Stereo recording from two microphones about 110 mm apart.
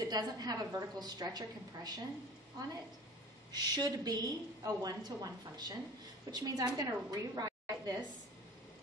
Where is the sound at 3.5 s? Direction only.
35° right (ahead or behind).